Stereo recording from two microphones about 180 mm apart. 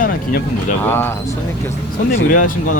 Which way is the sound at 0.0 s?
50° left (ahead or behind).